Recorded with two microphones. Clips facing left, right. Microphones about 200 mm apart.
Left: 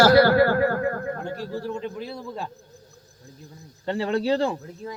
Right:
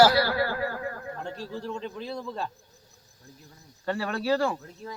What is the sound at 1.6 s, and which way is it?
Speech, 10° left (ahead or behind).